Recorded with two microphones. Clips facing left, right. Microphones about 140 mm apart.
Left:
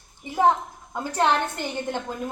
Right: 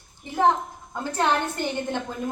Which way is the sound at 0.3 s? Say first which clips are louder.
Left 1 dB; 10° left (ahead or behind).